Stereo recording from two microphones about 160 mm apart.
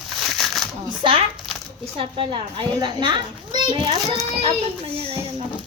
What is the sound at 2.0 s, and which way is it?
A child's voice, 35° right (ahead or behind).